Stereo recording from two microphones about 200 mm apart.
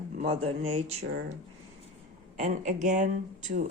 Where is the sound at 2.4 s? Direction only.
40° right (ahead or behind).